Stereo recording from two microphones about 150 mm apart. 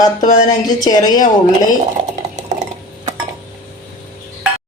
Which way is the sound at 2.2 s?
50° right (ahead or behind).